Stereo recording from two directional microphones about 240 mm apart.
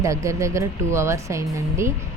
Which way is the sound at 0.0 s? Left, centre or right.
Centre.